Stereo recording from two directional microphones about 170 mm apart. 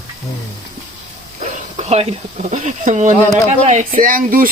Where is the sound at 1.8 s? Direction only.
40° right (ahead or behind).